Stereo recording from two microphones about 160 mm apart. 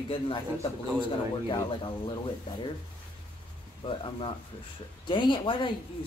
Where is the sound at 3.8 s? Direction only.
35° left (ahead or behind).